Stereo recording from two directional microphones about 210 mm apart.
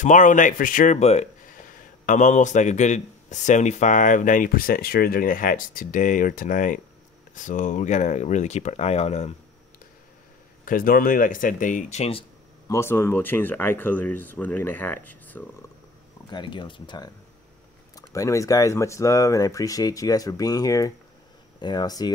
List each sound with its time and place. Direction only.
0.0 s speech: 35° left (ahead or behind)
10.6 s speech: 40° left (ahead or behind); by 12.7 s 25° left (ahead or behind)
12.7 s speech: 10° left (ahead or behind)
16.3 s speech: 20° left (ahead or behind)